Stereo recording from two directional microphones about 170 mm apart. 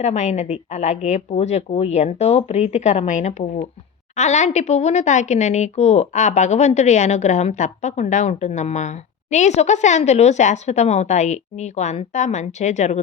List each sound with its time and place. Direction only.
0.0 s a woman's voice: 40° left (ahead or behind)